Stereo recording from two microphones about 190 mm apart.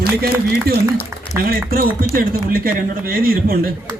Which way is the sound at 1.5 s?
50° right (ahead or behind).